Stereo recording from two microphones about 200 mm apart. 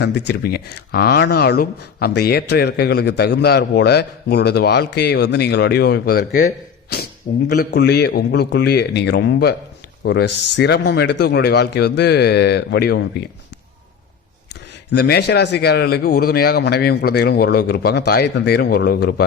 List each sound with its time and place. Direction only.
0.0 s speech: 55° left (ahead or behind)
14.9 s speech: 55° left (ahead or behind)